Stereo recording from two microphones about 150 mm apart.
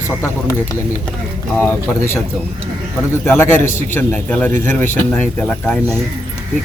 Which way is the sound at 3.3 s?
15° left (ahead or behind).